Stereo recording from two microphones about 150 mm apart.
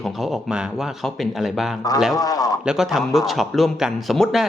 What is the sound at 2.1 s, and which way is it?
Speech, 25° left (ahead or behind).